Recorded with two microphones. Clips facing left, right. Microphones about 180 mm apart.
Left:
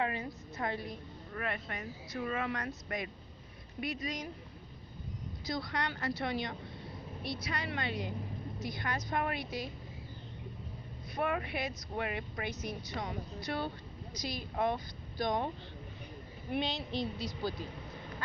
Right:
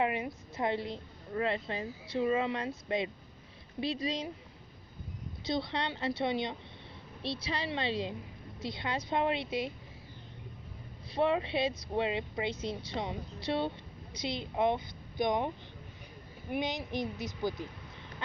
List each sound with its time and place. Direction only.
0.0 s a woman's voice: 20° right (ahead or behind)
5.5 s a woman's voice: 25° right (ahead or behind)
11.1 s a woman's voice: 25° right (ahead or behind)
16.5 s a woman's voice: 20° right (ahead or behind)